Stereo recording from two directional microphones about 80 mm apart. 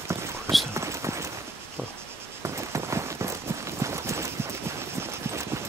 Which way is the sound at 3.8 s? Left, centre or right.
Right.